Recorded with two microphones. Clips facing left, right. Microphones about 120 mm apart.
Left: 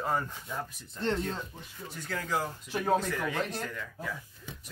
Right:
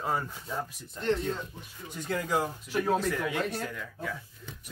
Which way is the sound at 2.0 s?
15° right (ahead or behind).